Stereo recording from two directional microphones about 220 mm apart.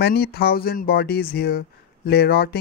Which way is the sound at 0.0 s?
45° left (ahead or behind).